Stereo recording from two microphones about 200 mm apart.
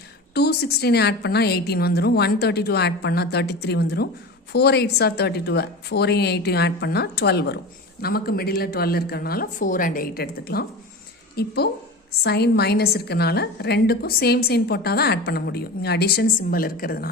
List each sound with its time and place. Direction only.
0.3 s a woman's voice: 55° left (ahead or behind)